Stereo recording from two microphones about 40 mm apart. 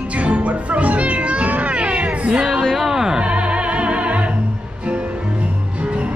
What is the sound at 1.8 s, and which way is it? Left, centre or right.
Cat, right.